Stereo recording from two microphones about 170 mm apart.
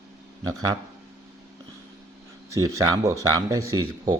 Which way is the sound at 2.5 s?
20° right (ahead or behind).